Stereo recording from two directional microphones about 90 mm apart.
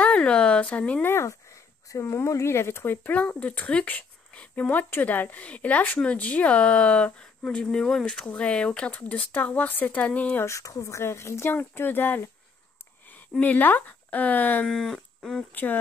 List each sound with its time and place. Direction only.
0.0 s a sound: 15° left (ahead or behind)
1.0 s speech: 25° left (ahead or behind)
10.4 s speech: 35° left (ahead or behind)
13.4 s speech: 20° left (ahead or behind)
14.7 s speech: 5° left (ahead or behind)
15.5 s speech: 20° left (ahead or behind)